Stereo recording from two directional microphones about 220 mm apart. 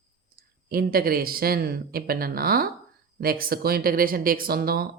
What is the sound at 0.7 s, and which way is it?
Speech, 40° right (ahead or behind).